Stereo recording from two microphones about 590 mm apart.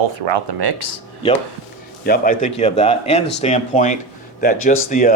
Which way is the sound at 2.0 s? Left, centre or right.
Centre.